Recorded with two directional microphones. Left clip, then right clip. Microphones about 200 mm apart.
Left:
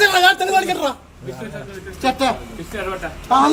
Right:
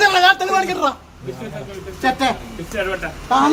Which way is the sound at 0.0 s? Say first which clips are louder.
Even; 55° left (ahead or behind).